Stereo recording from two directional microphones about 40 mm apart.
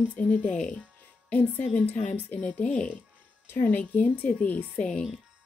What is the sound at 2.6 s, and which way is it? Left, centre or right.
Speech, left.